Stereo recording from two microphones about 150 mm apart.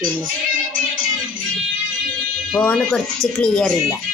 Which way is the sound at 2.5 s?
10° left (ahead or behind).